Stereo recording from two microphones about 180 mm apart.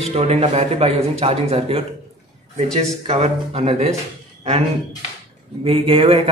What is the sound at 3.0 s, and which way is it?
Speech, 35° right (ahead or behind).